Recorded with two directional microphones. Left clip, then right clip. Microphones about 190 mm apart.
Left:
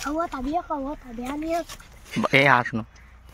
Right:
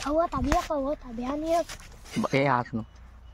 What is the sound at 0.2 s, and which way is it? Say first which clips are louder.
Speech: right 2 dB; 25° right (ahead or behind).